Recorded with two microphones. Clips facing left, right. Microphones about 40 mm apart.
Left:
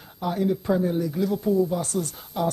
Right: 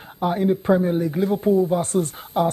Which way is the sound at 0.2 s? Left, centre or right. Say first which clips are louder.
Right 4 dB; right.